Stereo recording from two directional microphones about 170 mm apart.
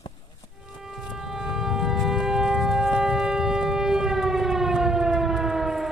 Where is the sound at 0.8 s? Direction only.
Centre (ahead or behind).